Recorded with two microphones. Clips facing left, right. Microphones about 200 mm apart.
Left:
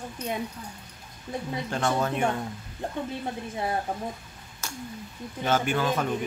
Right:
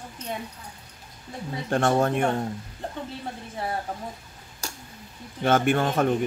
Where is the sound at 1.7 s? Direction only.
50° right (ahead or behind).